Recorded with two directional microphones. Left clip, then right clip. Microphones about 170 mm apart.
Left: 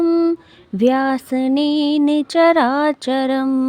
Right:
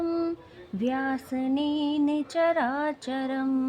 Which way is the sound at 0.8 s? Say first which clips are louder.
Left 13 dB; 45° left (ahead or behind).